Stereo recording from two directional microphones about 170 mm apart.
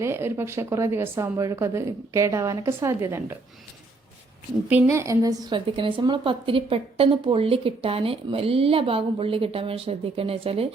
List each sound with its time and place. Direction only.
0.0 s speech: 15° right (ahead or behind)
4.7 s a woman's voice: 15° right (ahead or behind); by 10.7 s 35° right (ahead or behind)